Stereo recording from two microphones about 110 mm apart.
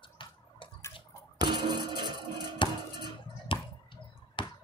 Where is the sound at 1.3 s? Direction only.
45° right (ahead or behind).